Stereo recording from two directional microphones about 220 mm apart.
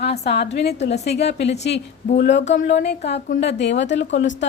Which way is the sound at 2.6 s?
50° left (ahead or behind).